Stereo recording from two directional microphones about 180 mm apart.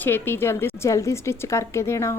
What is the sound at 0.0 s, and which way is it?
A woman's voice, 10° left (ahead or behind).